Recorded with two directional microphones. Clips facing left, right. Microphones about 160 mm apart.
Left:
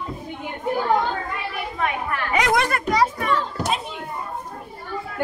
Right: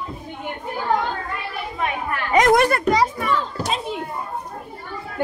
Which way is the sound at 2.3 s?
45° right (ahead or behind).